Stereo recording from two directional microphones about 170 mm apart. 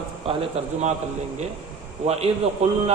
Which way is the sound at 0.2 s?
30° right (ahead or behind).